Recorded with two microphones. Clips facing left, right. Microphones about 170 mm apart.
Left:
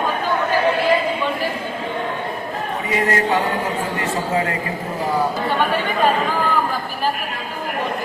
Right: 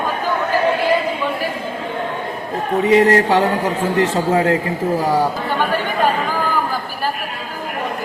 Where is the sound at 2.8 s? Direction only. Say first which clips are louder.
Right 8 dB; 70° right (ahead or behind).